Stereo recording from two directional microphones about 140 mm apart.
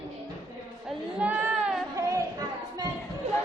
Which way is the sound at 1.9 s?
20° right (ahead or behind).